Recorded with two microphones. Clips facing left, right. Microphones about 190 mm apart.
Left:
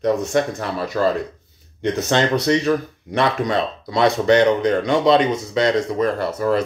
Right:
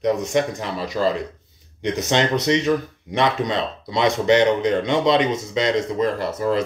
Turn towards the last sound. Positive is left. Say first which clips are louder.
# left 2 dB
turn(degrees=-20)  # may be behind; listen again after turning